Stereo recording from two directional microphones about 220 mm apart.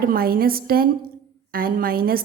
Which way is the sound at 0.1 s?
40° right (ahead or behind).